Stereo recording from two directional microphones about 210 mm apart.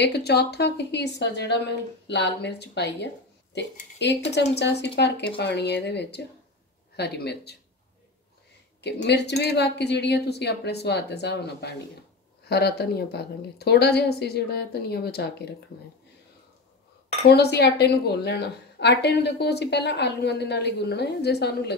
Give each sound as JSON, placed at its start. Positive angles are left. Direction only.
{"t": 0.0, "sound": "a woman's voice", "side_deg": 50}
{"t": 8.8, "sound": "a woman's voice", "side_deg": 55}
{"t": 17.3, "sound": "a woman's voice", "side_deg": 50}